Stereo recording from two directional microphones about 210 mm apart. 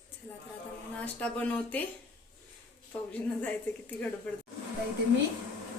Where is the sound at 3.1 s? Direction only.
5° left (ahead or behind).